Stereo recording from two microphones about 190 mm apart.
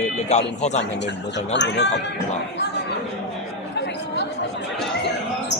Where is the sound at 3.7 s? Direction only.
65° left (ahead or behind).